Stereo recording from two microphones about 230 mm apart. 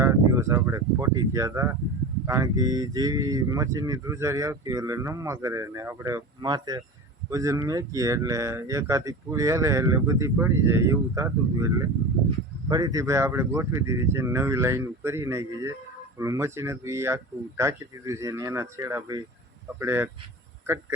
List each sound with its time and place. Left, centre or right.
0.0 s speech: centre